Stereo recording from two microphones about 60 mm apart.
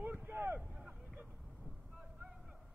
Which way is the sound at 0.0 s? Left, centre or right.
Right.